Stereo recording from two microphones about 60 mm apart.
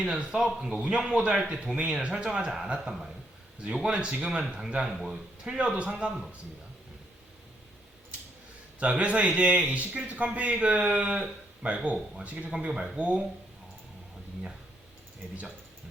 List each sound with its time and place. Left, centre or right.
0.0 s speech: centre
3.9 s speech: centre
5.5 s speech: centre
8.8 s a man's voice: right